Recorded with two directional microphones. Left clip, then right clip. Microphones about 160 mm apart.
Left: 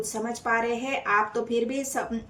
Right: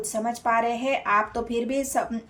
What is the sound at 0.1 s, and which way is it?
A woman's voice, 45° right (ahead or behind).